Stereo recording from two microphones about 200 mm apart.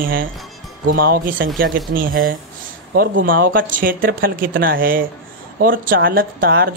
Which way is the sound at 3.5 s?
45° right (ahead or behind).